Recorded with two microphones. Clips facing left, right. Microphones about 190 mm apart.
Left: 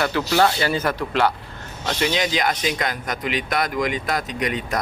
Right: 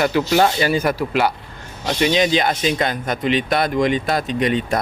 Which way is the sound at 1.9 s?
20° right (ahead or behind).